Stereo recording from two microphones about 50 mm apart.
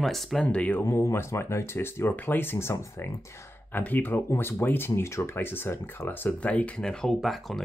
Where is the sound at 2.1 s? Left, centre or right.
Left.